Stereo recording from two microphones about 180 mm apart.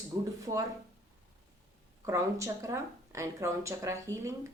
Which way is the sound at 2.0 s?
15° right (ahead or behind).